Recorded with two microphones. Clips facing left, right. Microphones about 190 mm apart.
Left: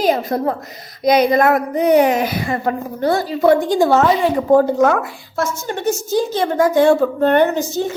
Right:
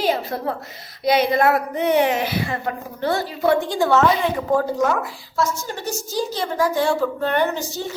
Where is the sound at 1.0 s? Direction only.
45° left (ahead or behind).